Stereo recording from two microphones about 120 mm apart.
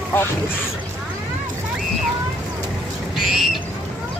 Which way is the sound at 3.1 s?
5° right (ahead or behind).